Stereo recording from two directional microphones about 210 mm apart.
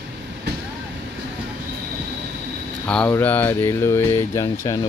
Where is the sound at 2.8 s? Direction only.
5° left (ahead or behind).